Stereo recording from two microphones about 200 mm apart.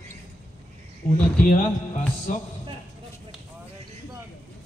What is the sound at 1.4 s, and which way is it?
Speech, 40° left (ahead or behind).